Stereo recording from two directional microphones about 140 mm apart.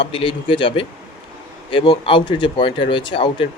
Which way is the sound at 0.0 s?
40° left (ahead or behind).